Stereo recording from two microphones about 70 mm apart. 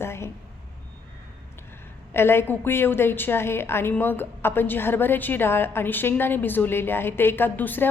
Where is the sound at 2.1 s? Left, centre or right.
Left.